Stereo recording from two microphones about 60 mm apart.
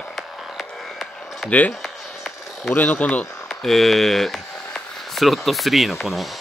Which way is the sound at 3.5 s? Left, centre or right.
Centre.